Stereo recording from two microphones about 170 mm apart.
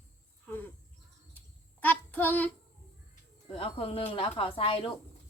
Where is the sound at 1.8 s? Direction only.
10° left (ahead or behind).